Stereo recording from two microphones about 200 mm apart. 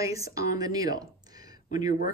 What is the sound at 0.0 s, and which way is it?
Speech, 15° right (ahead or behind).